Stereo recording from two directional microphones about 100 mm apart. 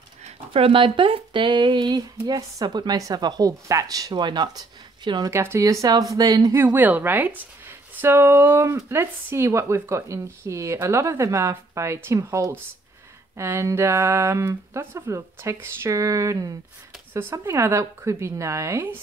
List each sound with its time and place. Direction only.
0.2 s speech: 70° right (ahead or behind); by 5.3 s 45° right (ahead or behind)
5.3 s speech: 25° right (ahead or behind)
6.5 s speech: 20° right (ahead or behind)
17.1 s speech: 25° right (ahead or behind)